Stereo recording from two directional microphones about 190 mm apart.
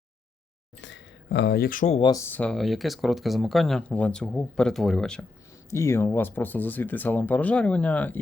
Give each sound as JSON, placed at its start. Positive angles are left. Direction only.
{"t": 0.8, "sound": "a sound", "side_deg": 75}
{"t": 2.0, "sound": "speech", "side_deg": 20}
{"t": 5.7, "sound": "speech", "side_deg": 15}